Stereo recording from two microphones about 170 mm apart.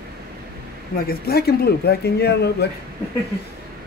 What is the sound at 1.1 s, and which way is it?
Speech, 65° left (ahead or behind).